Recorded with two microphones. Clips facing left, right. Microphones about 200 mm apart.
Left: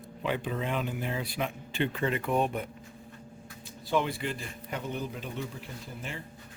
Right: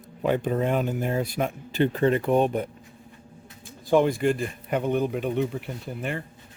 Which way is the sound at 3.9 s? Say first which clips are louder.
Right 9 dB; 45° right (ahead or behind).